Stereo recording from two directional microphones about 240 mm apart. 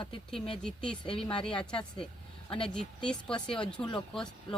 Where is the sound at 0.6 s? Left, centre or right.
Centre.